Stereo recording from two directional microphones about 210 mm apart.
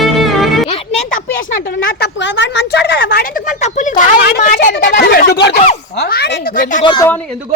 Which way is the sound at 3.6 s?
35° left (ahead or behind).